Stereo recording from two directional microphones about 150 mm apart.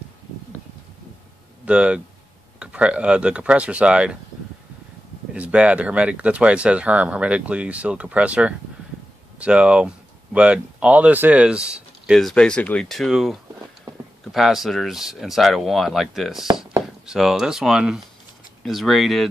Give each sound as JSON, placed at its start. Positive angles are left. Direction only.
{"t": 1.7, "sound": "speech", "side_deg": -5}
{"t": 5.3, "sound": "speech", "side_deg": -5}